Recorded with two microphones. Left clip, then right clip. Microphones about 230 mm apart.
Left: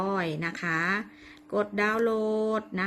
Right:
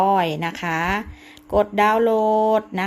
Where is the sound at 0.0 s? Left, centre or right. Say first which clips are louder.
Right 11 dB; centre.